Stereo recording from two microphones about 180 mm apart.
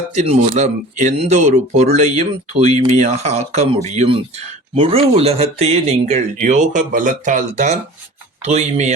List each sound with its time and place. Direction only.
0.1 s speech: 40° right (ahead or behind)